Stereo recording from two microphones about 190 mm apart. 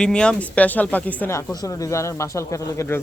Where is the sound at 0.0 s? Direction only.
5° left (ahead or behind).